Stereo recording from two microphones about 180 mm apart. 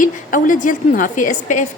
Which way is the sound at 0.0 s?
50° left (ahead or behind).